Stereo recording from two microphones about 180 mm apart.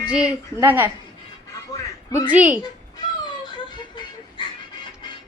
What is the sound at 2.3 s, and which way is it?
Speech, 10° right (ahead or behind).